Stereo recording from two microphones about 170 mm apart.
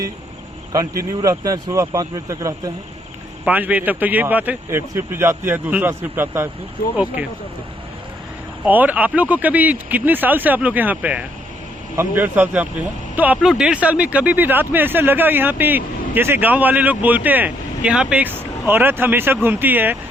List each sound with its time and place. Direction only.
0.7 s speech: 20° right (ahead or behind)
3.4 s speech: 10° right (ahead or behind)
8.6 s speech: 10° right (ahead or behind)